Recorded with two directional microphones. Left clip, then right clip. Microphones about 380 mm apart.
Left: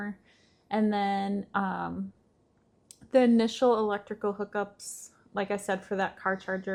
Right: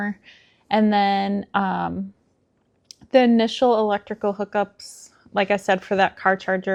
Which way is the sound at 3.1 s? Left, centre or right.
Centre.